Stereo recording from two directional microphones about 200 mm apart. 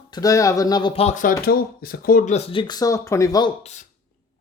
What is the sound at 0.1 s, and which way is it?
Speech, 15° left (ahead or behind).